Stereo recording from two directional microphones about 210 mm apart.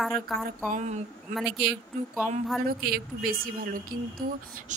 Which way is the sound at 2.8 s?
45° right (ahead or behind).